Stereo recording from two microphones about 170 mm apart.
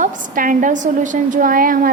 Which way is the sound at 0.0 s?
50° right (ahead or behind).